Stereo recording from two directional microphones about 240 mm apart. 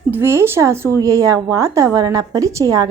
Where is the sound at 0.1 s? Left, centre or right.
Centre.